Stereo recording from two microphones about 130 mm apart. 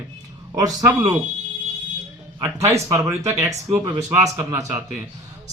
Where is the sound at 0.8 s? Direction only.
25° right (ahead or behind).